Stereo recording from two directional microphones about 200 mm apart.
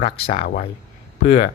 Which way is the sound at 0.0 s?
30° left (ahead or behind).